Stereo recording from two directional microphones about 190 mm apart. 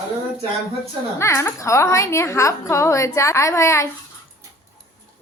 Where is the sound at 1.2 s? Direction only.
15° left (ahead or behind).